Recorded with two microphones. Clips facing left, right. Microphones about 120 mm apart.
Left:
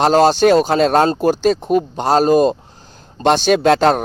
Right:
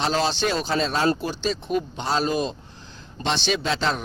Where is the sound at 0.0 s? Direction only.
45° left (ahead or behind).